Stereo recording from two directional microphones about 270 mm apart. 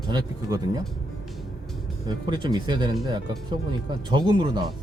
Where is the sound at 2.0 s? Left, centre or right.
Centre.